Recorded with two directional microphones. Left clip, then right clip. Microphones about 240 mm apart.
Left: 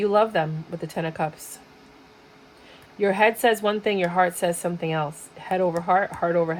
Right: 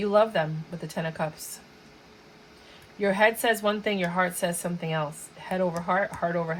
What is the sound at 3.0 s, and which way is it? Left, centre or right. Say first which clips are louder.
Speech: left 3 dB; left.